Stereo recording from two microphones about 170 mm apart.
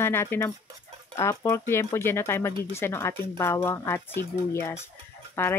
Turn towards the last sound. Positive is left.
turn(degrees=15)  # may be behind; listen again after turning